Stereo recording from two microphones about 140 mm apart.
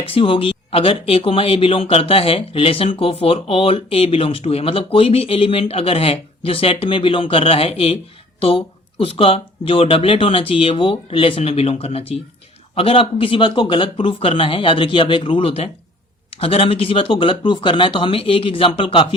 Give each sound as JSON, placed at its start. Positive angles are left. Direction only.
{"t": 0.0, "sound": "speech", "side_deg": 40}